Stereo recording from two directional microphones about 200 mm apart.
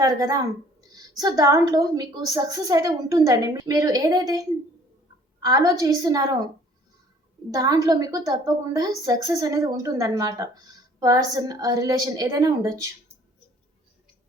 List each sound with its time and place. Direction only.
0.0 s a woman's voice: 20° right (ahead or behind)
7.5 s a woman's voice: 15° right (ahead or behind)